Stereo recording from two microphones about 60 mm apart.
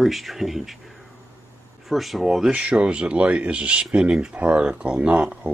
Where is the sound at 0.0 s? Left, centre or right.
Centre.